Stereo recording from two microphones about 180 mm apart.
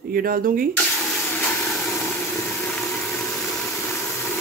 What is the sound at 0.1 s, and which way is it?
Speech, 55° right (ahead or behind).